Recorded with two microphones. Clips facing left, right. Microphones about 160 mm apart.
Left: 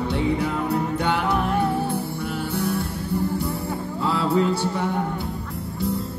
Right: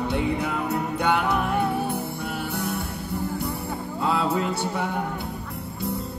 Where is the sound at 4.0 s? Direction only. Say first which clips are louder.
Left 2 dB; 60° right (ahead or behind).